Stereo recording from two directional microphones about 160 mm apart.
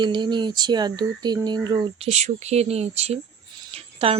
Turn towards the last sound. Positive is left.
turn(degrees=-40)  # may be behind; listen again after turning